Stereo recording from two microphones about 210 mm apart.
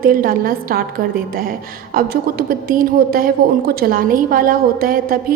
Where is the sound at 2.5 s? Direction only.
45° right (ahead or behind).